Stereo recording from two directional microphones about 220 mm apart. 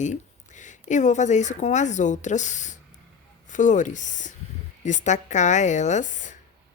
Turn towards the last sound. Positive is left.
turn(degrees=35)  # may be behind; listen again after turning